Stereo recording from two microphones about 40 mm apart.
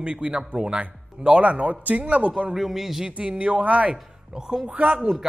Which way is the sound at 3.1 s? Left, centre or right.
Right.